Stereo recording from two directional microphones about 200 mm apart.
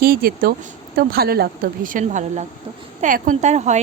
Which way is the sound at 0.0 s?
50° right (ahead or behind).